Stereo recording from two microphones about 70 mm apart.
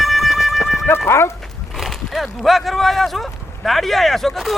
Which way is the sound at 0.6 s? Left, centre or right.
Left.